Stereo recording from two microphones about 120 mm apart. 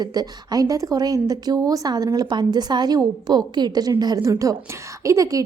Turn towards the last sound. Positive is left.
turn(degrees=-25)  # may be behind; listen again after turning